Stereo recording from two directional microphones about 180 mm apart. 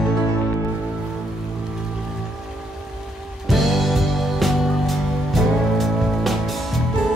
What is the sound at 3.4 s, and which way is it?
Music, centre (ahead or behind).